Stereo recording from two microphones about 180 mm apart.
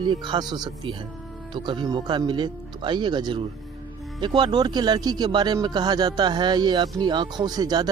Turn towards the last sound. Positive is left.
turn(degrees=-20)  # may be behind; listen again after turning